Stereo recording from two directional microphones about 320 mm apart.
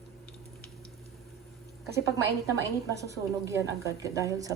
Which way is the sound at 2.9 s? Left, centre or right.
Centre.